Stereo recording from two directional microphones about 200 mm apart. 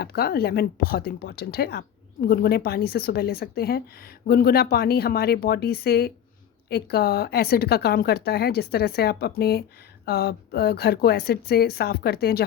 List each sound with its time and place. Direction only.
0.0 s speech: 50° left (ahead or behind)